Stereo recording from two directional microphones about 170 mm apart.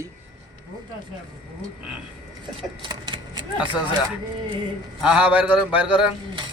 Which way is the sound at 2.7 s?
30° right (ahead or behind).